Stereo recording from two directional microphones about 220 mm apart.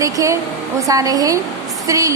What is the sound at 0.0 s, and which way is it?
A woman's voice, 15° right (ahead or behind).